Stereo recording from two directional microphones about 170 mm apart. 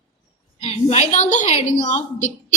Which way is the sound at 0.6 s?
40° left (ahead or behind).